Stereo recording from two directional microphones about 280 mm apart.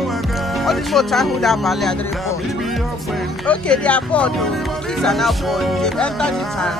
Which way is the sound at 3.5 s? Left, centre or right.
Centre.